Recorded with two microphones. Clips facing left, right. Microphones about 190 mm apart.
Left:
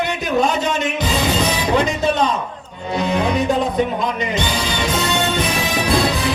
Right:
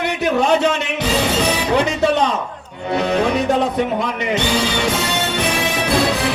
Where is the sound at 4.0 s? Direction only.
65° right (ahead or behind).